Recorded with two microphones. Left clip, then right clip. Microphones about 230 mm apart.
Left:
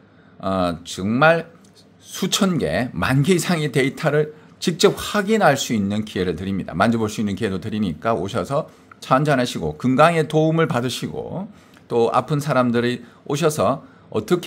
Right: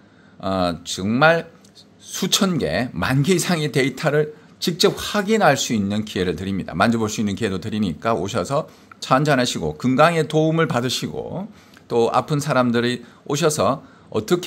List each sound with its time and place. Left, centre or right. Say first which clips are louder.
0.4 s speech: even; centre